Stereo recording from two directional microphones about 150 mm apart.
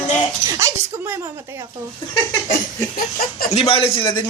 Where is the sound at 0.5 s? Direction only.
20° right (ahead or behind).